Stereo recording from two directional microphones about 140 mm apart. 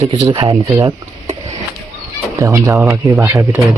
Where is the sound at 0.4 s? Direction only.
25° right (ahead or behind).